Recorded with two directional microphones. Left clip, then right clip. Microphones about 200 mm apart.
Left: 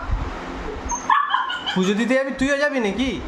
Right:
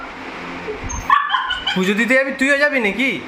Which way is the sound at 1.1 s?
20° left (ahead or behind).